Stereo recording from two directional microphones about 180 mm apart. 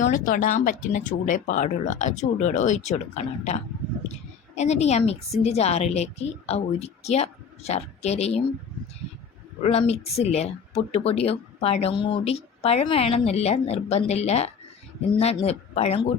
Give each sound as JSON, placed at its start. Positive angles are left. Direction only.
{"t": 0.0, "sound": "a woman's voice", "side_deg": 45}
{"t": 9.6, "sound": "a woman's voice", "side_deg": 35}